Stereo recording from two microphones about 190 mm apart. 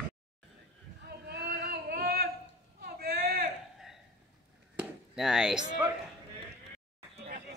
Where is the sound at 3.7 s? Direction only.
Centre (ahead or behind).